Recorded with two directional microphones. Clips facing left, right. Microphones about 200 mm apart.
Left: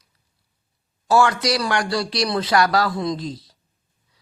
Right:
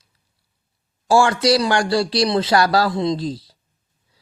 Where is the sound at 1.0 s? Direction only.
30° right (ahead or behind).